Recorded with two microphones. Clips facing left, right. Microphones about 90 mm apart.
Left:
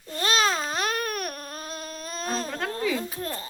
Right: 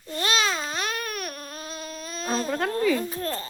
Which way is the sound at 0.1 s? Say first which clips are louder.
Left 1 dB; 35° left (ahead or behind).